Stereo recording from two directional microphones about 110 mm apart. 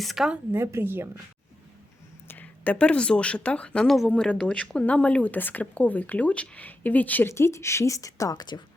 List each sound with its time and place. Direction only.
0.0 s speech: centre (ahead or behind)
0.5 s a woman's voice: 25° right (ahead or behind)
2.2 s speech: 15° left (ahead or behind); by 8.6 s 40° left (ahead or behind)